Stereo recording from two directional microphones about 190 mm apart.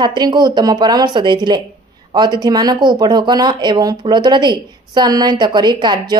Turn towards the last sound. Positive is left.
turn(degrees=-25)  # may be behind; listen again after turning